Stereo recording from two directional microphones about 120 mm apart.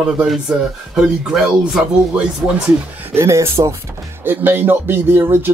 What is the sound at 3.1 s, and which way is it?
Speech, 20° right (ahead or behind).